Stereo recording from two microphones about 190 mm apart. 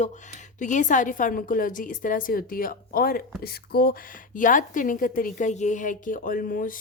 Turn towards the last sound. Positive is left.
turn(degrees=45)  # may be behind; listen again after turning